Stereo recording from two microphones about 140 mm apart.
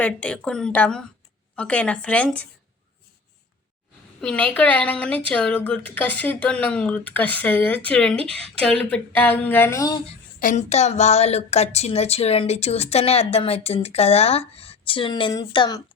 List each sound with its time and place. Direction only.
0.0 s a woman's voice: 10° left (ahead or behind)
4.2 s a woman's voice: 10° left (ahead or behind)
10.4 s a woman's voice: 55° left (ahead or behind); by 15.8 s 30° left (ahead or behind)